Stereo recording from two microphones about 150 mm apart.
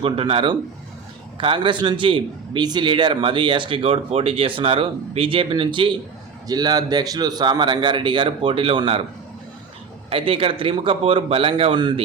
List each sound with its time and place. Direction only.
0.0 s a man's voice: 35° right (ahead or behind)
10.1 s a man's voice: 35° right (ahead or behind)